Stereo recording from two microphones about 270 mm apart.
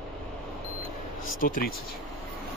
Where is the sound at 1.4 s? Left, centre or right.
Left.